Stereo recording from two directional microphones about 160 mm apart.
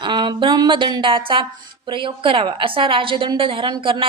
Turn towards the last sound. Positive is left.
turn(degrees=-30)  # may be behind; listen again after turning